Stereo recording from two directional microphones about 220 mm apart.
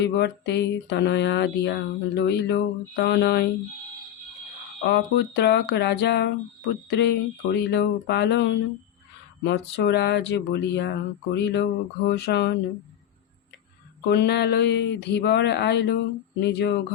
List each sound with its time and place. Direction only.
0.0 s speech: 50° left (ahead or behind)
4.8 s speech: 55° left (ahead or behind)
14.1 s speech: 50° left (ahead or behind)